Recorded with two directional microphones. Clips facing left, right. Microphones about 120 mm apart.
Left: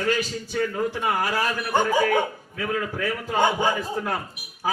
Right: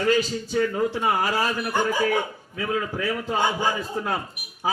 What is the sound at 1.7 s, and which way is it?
Speech, 20° left (ahead or behind).